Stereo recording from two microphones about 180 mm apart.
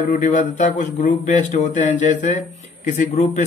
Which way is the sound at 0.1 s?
45° left (ahead or behind).